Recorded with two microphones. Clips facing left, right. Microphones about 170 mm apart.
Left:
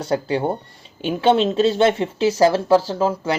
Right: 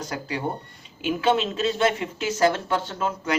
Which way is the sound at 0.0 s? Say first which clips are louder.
Left 8 dB; 30° left (ahead or behind).